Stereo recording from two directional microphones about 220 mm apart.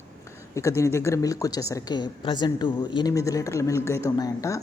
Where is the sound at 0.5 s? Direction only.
15° left (ahead or behind).